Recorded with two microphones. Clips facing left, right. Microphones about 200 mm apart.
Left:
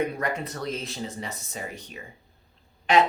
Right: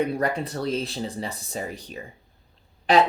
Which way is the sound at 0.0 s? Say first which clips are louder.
Right 3 dB; 35° right (ahead or behind).